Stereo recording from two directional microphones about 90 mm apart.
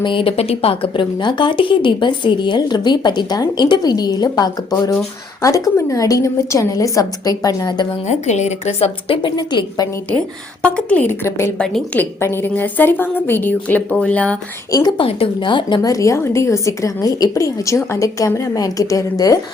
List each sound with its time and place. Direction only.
0.0 s a woman's voice: 70° left (ahead or behind); by 7.9 s 50° left (ahead or behind)
8.8 s a woman's voice: 75° left (ahead or behind)
9.3 s a woman's voice: 55° left (ahead or behind)
10.6 s a woman's voice: 15° left (ahead or behind); by 11.5 s 30° left (ahead or behind)
11.5 s speech: 10° left (ahead or behind)
11.9 s a woman's voice: 25° left (ahead or behind)
14.9 s speech: 80° left
15.8 s a woman's voice: 40° left (ahead or behind)